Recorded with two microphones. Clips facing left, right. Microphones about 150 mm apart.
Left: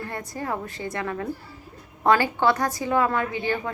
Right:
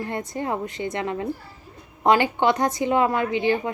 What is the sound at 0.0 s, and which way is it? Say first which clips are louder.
A woman's voice: right 4 dB; 20° right (ahead or behind).